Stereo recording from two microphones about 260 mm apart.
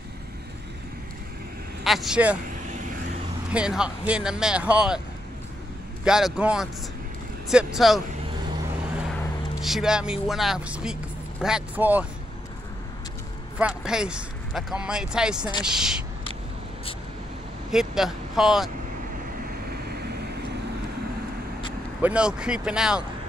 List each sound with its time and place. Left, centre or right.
1.9 s speech: centre
3.5 s speech: centre
6.0 s speech: centre
9.6 s speech: centre
13.6 s speech: centre
17.6 s speech: centre
22.0 s speech: centre